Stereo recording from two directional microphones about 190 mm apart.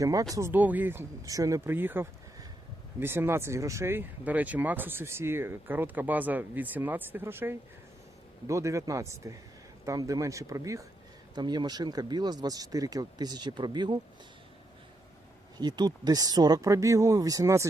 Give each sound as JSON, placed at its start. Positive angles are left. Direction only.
{"t": 0.0, "sound": "speech", "side_deg": -20}
{"t": 15.5, "sound": "speech", "side_deg": -20}